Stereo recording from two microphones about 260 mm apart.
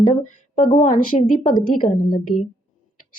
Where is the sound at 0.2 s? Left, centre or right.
Left.